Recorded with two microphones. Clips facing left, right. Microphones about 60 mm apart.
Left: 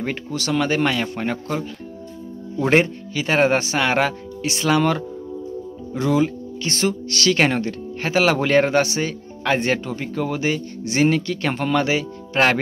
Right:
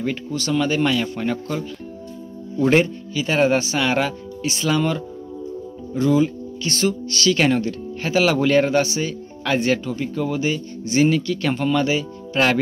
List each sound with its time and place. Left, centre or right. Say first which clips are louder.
0.0 s speech: right 1 dB; left
2.6 s speech: even; left
9.4 s speech: even; left
12.4 s speech: left 1 dB; left